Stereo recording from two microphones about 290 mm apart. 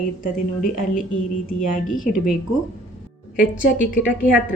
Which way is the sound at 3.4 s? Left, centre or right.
Left.